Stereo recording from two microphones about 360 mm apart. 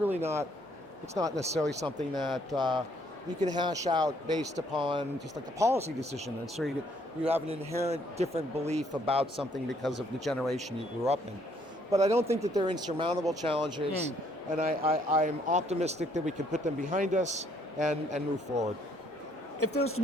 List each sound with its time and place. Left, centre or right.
0.0 s speech: centre
2.6 s speech: centre
6.4 s speech: centre
7.3 s speech: centre
9.6 s speech: centre
11.9 s speech: centre
14.6 s speech: right
19.5 s speech: left